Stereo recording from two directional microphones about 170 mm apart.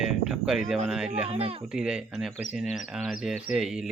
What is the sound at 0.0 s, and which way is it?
Speech, 5° right (ahead or behind).